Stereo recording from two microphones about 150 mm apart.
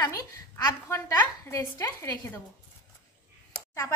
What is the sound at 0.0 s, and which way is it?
A woman's voice, 20° left (ahead or behind).